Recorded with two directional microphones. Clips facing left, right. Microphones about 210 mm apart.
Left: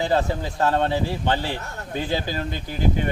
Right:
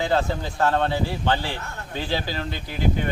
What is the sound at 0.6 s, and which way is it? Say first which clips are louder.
Speech: left 1 dB; 15° left (ahead or behind).